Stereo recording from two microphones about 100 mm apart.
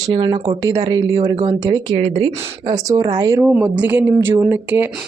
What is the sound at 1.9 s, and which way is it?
Speech, 70° right (ahead or behind).